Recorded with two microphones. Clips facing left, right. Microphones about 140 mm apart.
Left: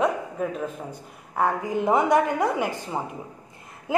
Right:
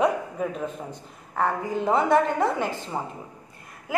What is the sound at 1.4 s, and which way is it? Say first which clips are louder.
A woman's voice: left 1 dB; 15° left (ahead or behind).